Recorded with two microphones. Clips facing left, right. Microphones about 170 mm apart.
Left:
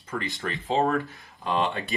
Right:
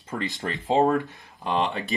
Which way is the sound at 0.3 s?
20° right (ahead or behind).